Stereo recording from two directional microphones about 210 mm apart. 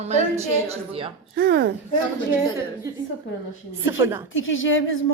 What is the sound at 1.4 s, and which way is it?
Speech, 50° right (ahead or behind).